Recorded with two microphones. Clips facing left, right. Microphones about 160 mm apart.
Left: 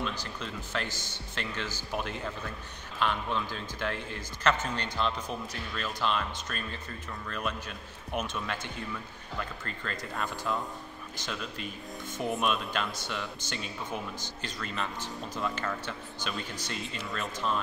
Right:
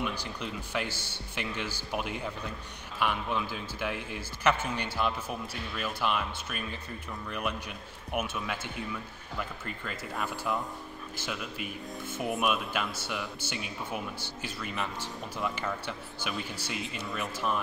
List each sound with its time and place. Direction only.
0.0 s speech: 15° right (ahead or behind)